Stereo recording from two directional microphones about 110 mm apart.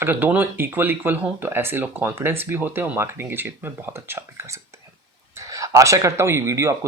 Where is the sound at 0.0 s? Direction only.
15° right (ahead or behind).